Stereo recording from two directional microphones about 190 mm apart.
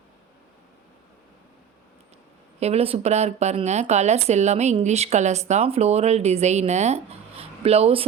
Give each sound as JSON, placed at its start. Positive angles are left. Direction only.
{"t": 2.6, "sound": "speech", "side_deg": -35}